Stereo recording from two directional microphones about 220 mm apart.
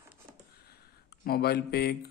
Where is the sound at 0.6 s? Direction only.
45° left (ahead or behind).